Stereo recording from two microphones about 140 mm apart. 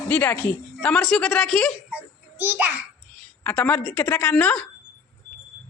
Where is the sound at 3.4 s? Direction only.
10° left (ahead or behind).